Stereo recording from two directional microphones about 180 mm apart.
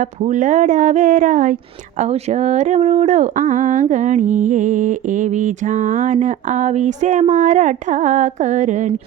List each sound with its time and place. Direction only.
0.0 s speech: 40° right (ahead or behind)